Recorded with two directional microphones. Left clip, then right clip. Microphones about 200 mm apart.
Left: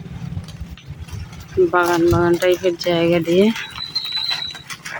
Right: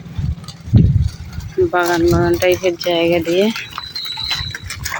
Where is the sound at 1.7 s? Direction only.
Centre (ahead or behind).